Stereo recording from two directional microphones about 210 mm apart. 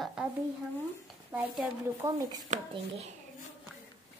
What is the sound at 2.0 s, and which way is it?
Speech, 15° right (ahead or behind).